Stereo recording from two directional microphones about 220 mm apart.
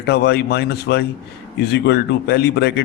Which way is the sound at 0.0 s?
50° left (ahead or behind).